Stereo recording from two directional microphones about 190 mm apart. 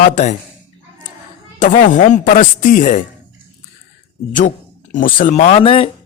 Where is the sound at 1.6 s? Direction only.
45° left (ahead or behind).